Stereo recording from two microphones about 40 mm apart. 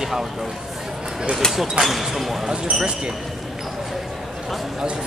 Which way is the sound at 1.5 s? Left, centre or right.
Centre.